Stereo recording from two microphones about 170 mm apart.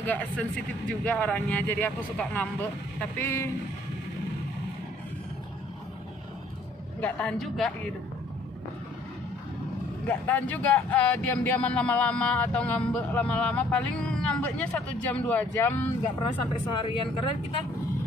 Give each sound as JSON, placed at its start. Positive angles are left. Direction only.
{"t": 0.0, "sound": "speech", "side_deg": 10}
{"t": 7.0, "sound": "a man's voice", "side_deg": 5}
{"t": 10.0, "sound": "speech", "side_deg": 10}
{"t": 16.3, "sound": "speech", "side_deg": 30}